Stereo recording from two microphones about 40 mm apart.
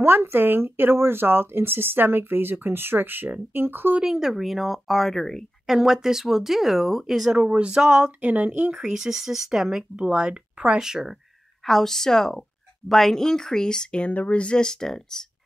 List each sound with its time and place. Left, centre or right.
0.0 s speech: right
4.0 s speech: centre
5.7 s speech: centre
7.5 s speech: right
7.8 s speech: centre
8.2 s speech: right
8.5 s speech: right
8.9 s speech: centre
9.9 s speech: right
10.8 s speech: centre
11.6 s speech: centre
14.0 s speech: left; by 15.2 s centre